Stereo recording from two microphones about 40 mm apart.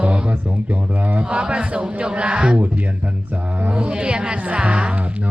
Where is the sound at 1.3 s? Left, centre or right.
Right.